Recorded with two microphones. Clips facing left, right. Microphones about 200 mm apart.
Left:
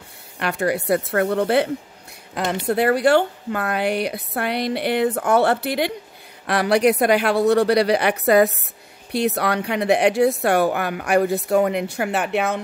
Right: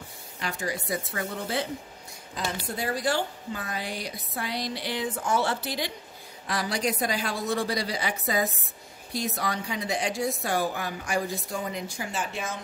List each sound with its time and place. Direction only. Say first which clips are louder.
0.4 s a woman's voice: left 10 dB; 65° left (ahead or behind)